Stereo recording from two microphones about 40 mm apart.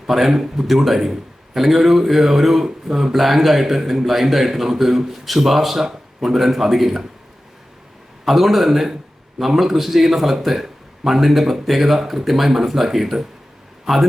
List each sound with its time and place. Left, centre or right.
0.1 s a man's voice: centre
8.2 s a man's voice: centre